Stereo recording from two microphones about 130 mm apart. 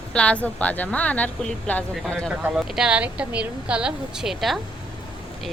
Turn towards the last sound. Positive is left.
turn(degrees=0)  # may be behind; listen again after turning